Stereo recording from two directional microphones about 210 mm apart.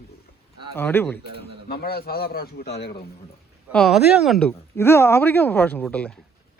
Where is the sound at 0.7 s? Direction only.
10° left (ahead or behind).